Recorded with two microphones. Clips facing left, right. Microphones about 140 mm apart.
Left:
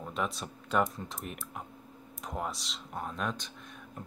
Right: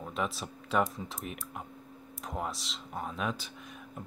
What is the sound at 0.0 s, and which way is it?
Speech, centre (ahead or behind).